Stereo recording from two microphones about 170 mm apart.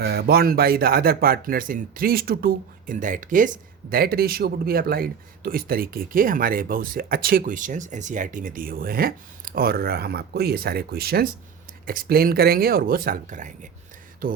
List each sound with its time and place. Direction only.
0.0 s speech: 70° right (ahead or behind)